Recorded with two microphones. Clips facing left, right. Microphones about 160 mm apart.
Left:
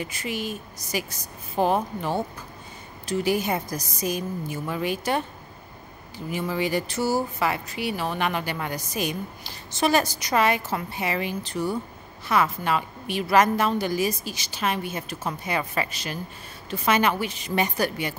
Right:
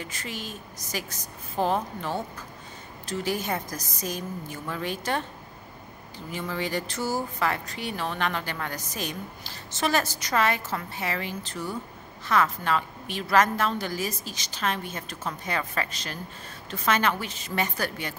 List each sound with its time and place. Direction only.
0.0 s speech: 10° left (ahead or behind)